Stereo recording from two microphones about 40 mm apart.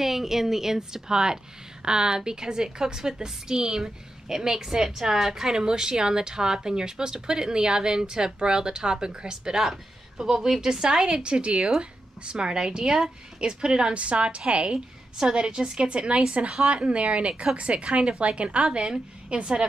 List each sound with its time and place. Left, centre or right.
0.0 s a woman's voice: centre; by 19.6 s right